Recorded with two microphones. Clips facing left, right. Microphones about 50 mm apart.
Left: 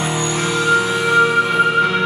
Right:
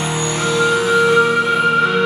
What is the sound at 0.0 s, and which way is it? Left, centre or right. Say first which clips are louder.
Music: even; left.